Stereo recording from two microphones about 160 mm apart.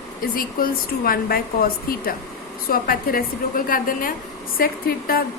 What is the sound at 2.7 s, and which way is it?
A woman's voice, 65° left (ahead or behind).